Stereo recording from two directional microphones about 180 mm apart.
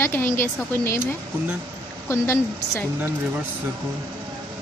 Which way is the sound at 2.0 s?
10° left (ahead or behind).